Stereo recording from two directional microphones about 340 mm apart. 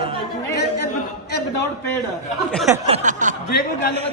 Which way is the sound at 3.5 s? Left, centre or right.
Left.